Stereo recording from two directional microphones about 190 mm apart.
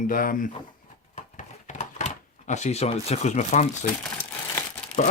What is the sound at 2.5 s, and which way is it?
Speech, 35° left (ahead or behind).